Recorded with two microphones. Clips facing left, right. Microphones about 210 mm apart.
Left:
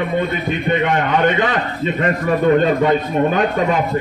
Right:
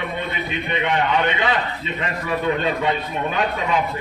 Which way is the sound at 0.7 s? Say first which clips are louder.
Left 4 dB; 45° left (ahead or behind).